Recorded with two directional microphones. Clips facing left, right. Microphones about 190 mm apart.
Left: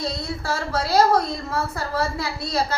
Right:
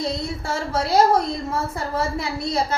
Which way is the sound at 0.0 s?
25° right (ahead or behind).